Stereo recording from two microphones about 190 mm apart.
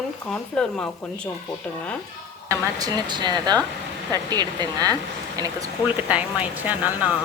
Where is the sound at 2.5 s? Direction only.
15° right (ahead or behind).